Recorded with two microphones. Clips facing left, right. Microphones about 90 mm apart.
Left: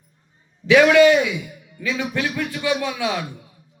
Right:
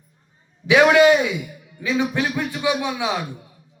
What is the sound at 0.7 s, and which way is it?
Speech, 20° right (ahead or behind).